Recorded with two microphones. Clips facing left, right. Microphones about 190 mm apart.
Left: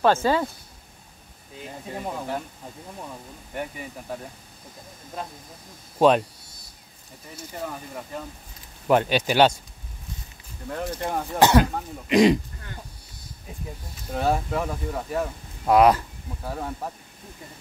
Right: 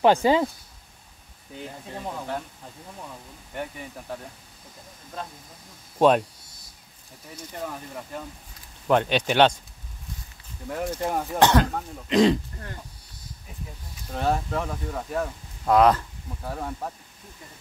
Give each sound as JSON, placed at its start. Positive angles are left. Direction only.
{"t": 0.0, "sound": "speech", "side_deg": -15}
{"t": 1.9, "sound": "speech", "side_deg": 10}
{"t": 3.5, "sound": "speech", "side_deg": 5}
{"t": 5.9, "sound": "speech", "side_deg": 0}
{"t": 7.5, "sound": "speech", "side_deg": 0}
{"t": 10.7, "sound": "speech", "side_deg": -10}
{"t": 11.3, "sound": "speech", "side_deg": 10}
{"t": 14.1, "sound": "speech", "side_deg": 10}